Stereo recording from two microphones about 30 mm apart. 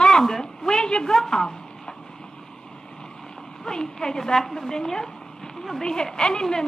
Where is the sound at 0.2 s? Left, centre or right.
Centre.